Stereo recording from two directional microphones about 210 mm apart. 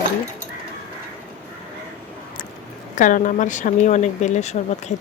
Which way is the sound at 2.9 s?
40° left (ahead or behind).